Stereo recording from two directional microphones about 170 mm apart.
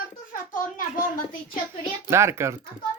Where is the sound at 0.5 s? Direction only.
55° left (ahead or behind).